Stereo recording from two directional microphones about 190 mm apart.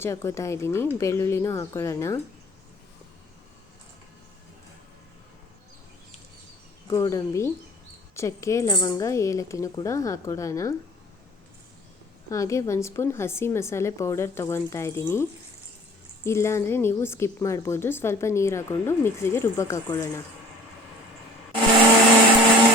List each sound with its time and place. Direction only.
0.0 s a woman's voice: 15° left (ahead or behind)
6.8 s a woman's voice: 15° left (ahead or behind)
12.3 s a woman's voice: 15° left (ahead or behind)